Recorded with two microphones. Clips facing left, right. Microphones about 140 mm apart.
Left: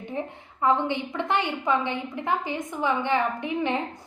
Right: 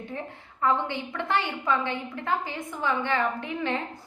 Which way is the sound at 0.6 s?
20° left (ahead or behind).